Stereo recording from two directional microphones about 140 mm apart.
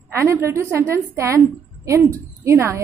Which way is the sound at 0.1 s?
20° right (ahead or behind).